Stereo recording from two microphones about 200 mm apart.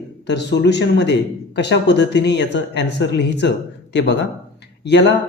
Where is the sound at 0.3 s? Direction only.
60° left (ahead or behind).